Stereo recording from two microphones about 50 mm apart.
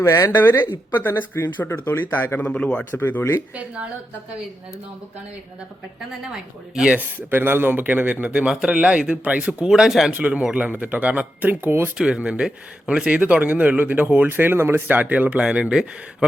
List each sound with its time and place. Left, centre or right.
0.0 s speech: left
0.3 s speech: left
2.4 s speech: left
3.0 s speech: left
7.3 s speech: right
8.3 s speech: right
9.6 s speech: centre
10.1 s speech: right
11.9 s speech: centre; by 14.3 s right
14.3 s speech: right
14.8 s speech: right; by 15.9 s centre